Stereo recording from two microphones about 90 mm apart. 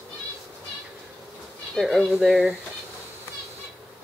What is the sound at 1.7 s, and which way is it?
Speech, centre (ahead or behind).